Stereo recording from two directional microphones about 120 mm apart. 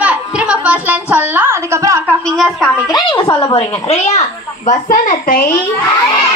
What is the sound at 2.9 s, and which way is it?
A child's voice, 40° left (ahead or behind).